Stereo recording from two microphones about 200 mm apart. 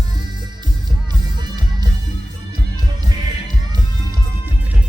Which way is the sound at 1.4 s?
20° right (ahead or behind).